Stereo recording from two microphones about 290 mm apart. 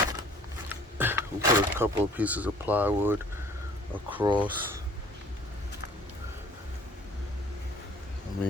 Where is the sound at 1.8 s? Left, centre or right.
Centre.